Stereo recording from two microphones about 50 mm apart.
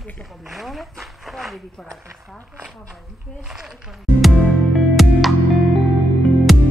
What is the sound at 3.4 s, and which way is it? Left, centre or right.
Music, centre.